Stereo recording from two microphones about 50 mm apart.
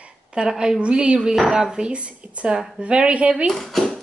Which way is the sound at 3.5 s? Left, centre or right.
Centre.